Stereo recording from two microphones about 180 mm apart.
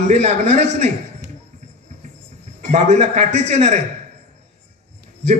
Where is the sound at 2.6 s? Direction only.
40° right (ahead or behind).